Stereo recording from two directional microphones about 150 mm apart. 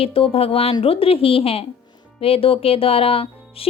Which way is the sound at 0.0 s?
35° left (ahead or behind).